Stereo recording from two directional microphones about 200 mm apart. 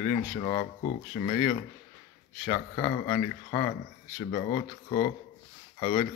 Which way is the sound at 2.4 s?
15° left (ahead or behind).